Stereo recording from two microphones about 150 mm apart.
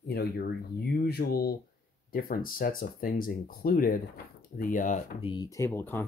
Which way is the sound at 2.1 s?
75° left (ahead or behind).